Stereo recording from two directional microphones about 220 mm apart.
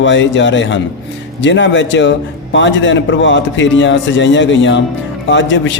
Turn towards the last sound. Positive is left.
turn(degrees=55)  # may be behind; listen again after turning